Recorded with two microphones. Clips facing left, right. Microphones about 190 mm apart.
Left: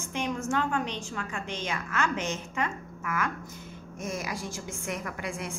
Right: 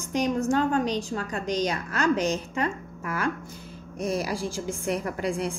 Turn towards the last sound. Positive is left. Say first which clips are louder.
# right 7 dB
turn(degrees=-35)  # may be behind; listen again after turning